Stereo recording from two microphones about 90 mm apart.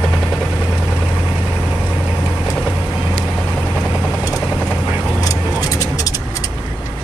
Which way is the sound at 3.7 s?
5° left (ahead or behind).